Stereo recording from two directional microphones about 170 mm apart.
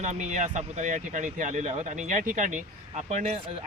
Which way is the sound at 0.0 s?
45° right (ahead or behind).